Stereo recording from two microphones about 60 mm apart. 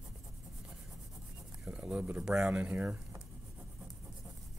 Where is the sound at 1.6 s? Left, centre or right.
Centre.